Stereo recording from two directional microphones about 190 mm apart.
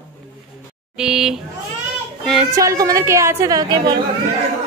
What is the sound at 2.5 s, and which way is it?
A woman's voice, 15° right (ahead or behind).